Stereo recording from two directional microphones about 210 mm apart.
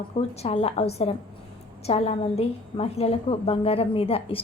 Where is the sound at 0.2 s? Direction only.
30° left (ahead or behind).